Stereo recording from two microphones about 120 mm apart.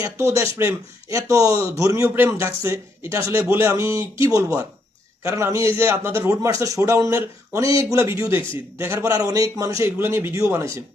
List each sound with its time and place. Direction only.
0.0 s a man's voice: 25° right (ahead or behind)